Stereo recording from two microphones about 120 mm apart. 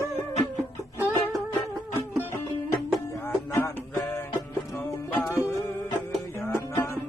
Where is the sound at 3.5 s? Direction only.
20° left (ahead or behind).